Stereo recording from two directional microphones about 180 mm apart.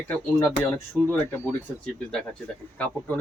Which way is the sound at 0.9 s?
15° right (ahead or behind).